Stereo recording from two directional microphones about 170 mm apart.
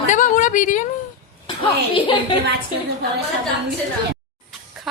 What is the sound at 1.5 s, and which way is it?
Speech, 30° left (ahead or behind).